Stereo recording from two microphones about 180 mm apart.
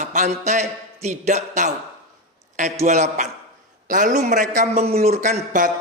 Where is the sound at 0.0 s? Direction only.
40° right (ahead or behind).